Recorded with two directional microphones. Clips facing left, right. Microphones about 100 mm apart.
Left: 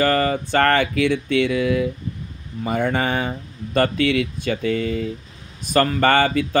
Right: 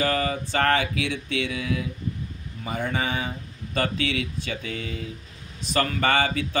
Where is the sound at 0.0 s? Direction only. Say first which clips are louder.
Left 6 dB; 50° left (ahead or behind).